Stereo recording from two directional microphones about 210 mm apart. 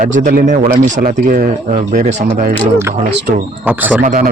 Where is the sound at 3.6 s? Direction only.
10° right (ahead or behind).